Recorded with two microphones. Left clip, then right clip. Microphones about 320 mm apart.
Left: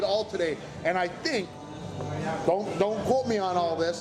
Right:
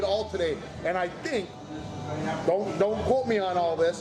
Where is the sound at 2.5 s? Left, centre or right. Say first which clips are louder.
Right 1 dB; left.